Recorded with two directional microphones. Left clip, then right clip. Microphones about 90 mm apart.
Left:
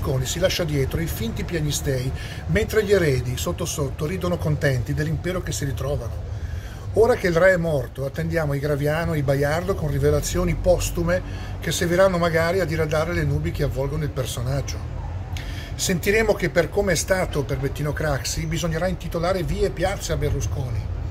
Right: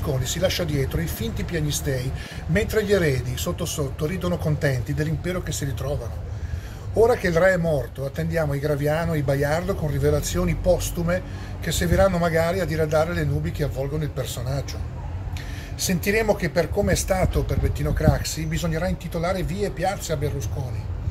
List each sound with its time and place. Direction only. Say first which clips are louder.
0.0 s speech: left 1 dB; 40° left (ahead or behind)
7.0 s speech: left 1 dB; 45° left (ahead or behind)
15.8 s speech: left 2 dB; 45° left (ahead or behind)